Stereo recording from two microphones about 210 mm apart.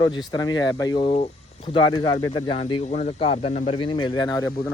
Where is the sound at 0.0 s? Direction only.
20° left (ahead or behind).